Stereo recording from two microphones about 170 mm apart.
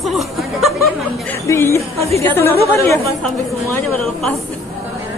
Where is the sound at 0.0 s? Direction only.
Centre (ahead or behind).